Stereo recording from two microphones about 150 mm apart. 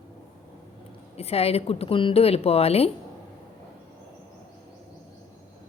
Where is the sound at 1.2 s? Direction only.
45° left (ahead or behind).